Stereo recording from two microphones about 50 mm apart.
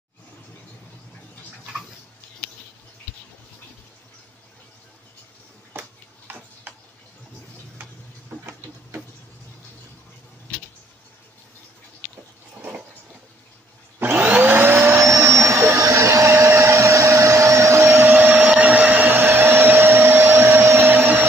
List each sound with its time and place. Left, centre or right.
5.7 s a sound: right
13.9 s vacuum cleaner: right
15.0 s vacuum cleaner: right
18.0 s vacuum cleaner: right